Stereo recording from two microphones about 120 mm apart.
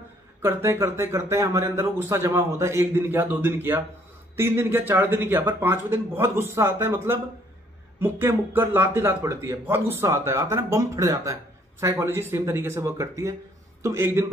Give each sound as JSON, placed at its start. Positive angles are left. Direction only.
{"t": 0.4, "sound": "speech", "side_deg": -20}